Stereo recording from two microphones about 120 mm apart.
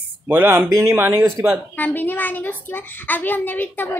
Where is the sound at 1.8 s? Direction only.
15° left (ahead or behind).